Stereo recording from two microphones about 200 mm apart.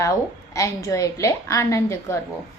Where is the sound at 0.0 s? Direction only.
15° left (ahead or behind).